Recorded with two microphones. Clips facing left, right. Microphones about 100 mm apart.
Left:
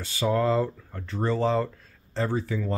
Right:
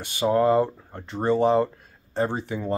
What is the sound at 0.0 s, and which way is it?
Speech, 20° right (ahead or behind).